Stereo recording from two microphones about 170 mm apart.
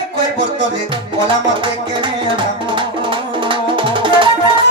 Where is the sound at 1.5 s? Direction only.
30° right (ahead or behind).